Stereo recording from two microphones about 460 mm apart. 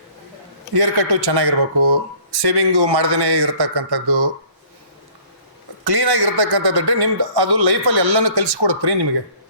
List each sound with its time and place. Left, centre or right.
0.7 s a man's voice: right
5.8 s a man's voice: right